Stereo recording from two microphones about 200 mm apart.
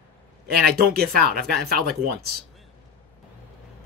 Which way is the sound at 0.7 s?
50° right (ahead or behind).